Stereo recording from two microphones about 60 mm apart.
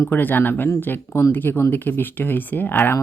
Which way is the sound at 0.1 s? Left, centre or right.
Left.